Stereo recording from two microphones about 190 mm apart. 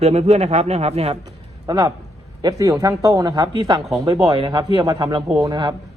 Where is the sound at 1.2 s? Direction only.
20° right (ahead or behind).